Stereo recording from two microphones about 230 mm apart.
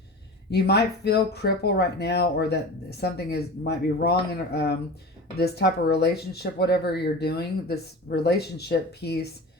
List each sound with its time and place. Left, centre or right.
0.5 s speech: left